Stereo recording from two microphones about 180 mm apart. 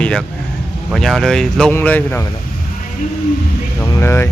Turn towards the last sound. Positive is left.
turn(degrees=15)  # may be behind; listen again after turning